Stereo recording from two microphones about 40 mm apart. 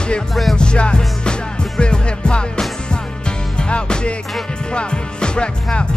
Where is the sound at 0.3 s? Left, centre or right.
Centre.